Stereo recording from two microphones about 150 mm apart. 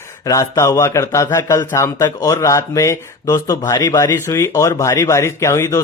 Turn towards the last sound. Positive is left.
turn(degrees=20)  # may be behind; listen again after turning